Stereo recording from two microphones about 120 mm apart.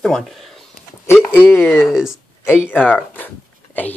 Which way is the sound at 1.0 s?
15° left (ahead or behind).